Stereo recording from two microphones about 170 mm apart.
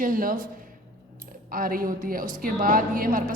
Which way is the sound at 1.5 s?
55° right (ahead or behind).